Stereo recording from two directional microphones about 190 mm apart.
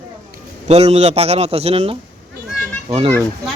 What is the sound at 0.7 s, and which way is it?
A man's voice, 35° right (ahead or behind).